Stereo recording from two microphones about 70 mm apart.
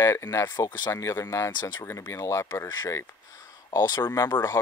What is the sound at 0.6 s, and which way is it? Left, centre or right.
Speech, left.